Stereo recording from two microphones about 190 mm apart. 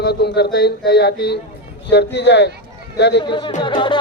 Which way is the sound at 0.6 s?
60° left (ahead or behind).